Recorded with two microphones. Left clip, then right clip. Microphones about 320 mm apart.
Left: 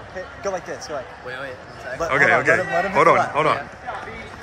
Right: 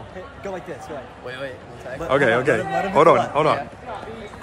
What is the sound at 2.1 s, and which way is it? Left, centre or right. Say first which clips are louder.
A man's voice: left 2 dB; centre.